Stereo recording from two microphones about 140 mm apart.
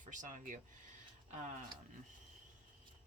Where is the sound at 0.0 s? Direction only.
65° right (ahead or behind).